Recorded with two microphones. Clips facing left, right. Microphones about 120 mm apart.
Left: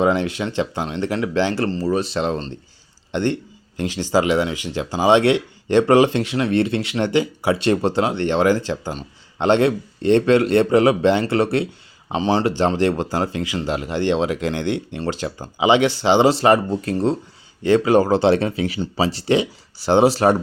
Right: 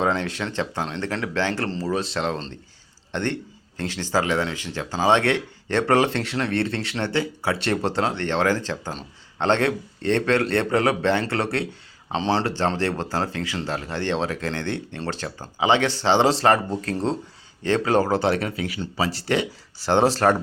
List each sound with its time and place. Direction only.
0.0 s speech: 10° left (ahead or behind)
2.1 s a man's voice: 15° left (ahead or behind)